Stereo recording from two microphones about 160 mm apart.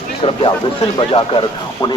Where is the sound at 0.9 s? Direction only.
30° left (ahead or behind).